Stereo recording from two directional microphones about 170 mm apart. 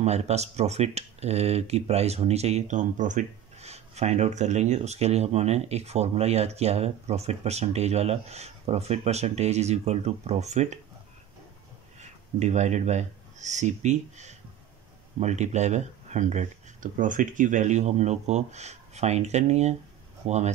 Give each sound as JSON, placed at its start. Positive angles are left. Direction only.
{"t": 0.0, "sound": "speech", "side_deg": -40}
{"t": 12.0, "sound": "speech", "side_deg": -45}